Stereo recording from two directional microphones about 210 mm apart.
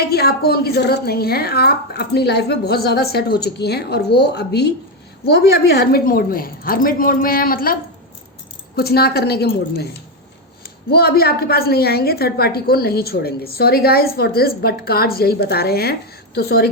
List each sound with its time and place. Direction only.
0.0 s a woman's voice: 50° left (ahead or behind)